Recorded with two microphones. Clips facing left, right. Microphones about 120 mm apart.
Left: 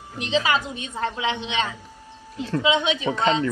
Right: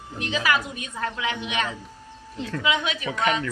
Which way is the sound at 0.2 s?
25° left (ahead or behind).